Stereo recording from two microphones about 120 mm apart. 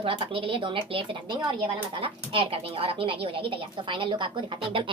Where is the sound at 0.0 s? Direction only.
45° right (ahead or behind).